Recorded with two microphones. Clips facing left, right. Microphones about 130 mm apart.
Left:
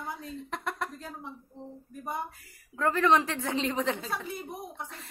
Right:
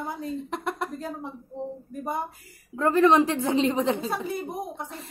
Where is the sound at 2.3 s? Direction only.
25° right (ahead or behind).